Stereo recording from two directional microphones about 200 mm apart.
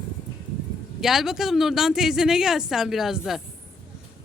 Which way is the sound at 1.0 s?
Centre (ahead or behind).